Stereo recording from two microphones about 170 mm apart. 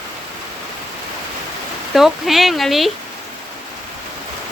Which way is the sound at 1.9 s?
Centre (ahead or behind).